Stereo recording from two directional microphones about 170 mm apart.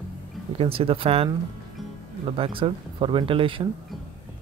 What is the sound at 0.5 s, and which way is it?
Speech, 35° right (ahead or behind).